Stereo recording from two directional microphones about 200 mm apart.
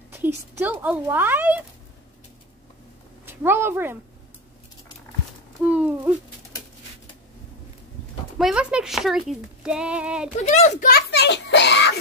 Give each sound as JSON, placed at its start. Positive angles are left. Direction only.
{"t": 0.1, "sound": "speech", "side_deg": -10}
{"t": 3.3, "sound": "speech", "side_deg": -10}
{"t": 5.6, "sound": "speech", "side_deg": -5}
{"t": 8.4, "sound": "speech", "side_deg": -5}
{"t": 10.4, "sound": "a child's voice", "side_deg": 35}
{"t": 10.9, "sound": "a child's voice", "side_deg": 55}